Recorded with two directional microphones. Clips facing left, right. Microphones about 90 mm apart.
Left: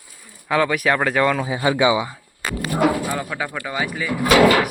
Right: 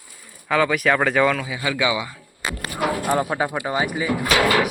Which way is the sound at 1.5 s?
35° left (ahead or behind).